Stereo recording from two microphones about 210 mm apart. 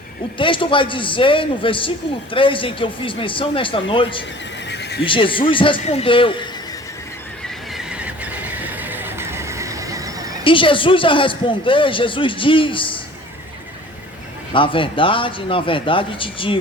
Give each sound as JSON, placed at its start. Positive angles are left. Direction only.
{"t": 0.3, "sound": "a man's voice", "side_deg": 25}
{"t": 4.7, "sound": "neigh", "side_deg": 50}
{"t": 5.0, "sound": "a man's voice", "side_deg": 25}
{"t": 7.4, "sound": "neigh", "side_deg": 0}
{"t": 10.4, "sound": "a man's voice", "side_deg": 25}
{"t": 14.5, "sound": "a man's voice", "side_deg": 25}